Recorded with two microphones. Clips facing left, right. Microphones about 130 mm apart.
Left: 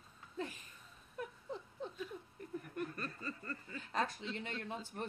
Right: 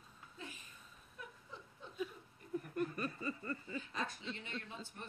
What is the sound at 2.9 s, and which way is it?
Snicker, 10° right (ahead or behind).